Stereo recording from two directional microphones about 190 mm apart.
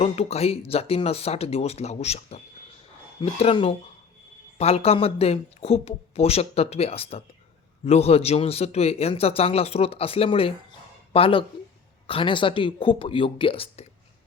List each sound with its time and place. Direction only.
0.0 s a man's voice: 35° left (ahead or behind)